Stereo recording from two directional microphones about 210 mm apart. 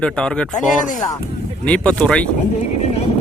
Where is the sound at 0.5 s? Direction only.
35° left (ahead or behind).